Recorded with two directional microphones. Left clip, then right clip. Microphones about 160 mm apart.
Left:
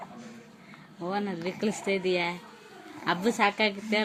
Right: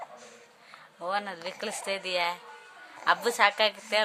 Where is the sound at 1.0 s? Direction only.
25° right (ahead or behind).